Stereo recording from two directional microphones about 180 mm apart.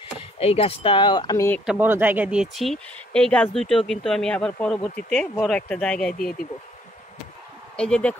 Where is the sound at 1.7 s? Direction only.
10° right (ahead or behind).